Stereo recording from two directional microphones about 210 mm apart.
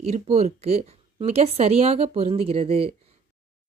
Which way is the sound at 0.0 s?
30° right (ahead or behind).